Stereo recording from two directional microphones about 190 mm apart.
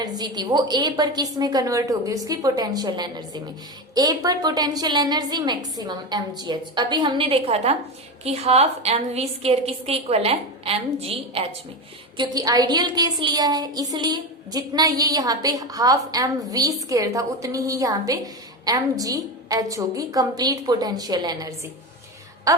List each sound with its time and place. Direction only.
0.0 s a woman's voice: 20° right (ahead or behind)